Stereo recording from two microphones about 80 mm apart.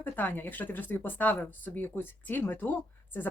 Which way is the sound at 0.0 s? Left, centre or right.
Left.